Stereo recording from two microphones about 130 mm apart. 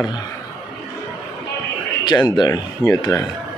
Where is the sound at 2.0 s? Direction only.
35° left (ahead or behind).